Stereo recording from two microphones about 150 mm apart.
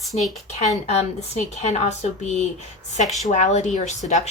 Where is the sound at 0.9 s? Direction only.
45° left (ahead or behind).